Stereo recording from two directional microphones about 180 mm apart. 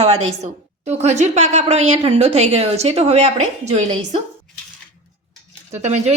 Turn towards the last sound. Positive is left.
turn(degrees=-40)  # may be behind; listen again after turning